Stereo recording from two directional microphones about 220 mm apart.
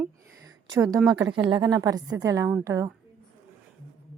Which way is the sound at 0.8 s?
Centre (ahead or behind).